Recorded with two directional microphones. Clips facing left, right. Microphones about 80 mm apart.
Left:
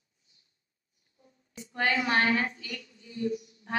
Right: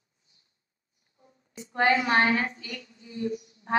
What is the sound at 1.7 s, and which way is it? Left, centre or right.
A woman's voice, right.